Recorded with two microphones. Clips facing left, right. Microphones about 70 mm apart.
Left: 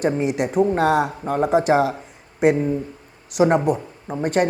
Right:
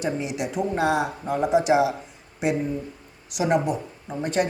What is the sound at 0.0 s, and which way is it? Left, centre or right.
A man's voice, left.